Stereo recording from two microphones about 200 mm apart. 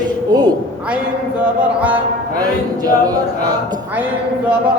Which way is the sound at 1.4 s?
5° right (ahead or behind).